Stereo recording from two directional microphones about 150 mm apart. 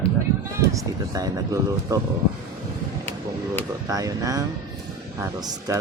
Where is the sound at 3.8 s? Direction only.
25° right (ahead or behind).